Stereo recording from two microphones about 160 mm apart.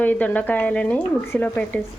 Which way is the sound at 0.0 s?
10° left (ahead or behind).